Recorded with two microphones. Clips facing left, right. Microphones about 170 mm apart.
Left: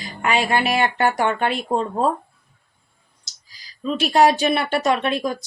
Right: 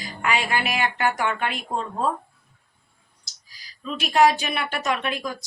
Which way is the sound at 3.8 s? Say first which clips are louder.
Left 3 dB; 30° left (ahead or behind).